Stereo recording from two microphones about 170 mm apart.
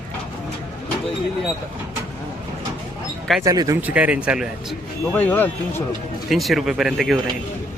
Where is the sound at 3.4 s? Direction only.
20° right (ahead or behind).